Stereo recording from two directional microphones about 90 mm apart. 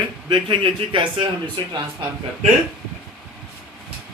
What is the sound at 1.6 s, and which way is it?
Speech, 55° right (ahead or behind).